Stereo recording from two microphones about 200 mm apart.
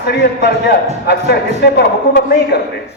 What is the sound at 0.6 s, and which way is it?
A man's voice, 60° left (ahead or behind).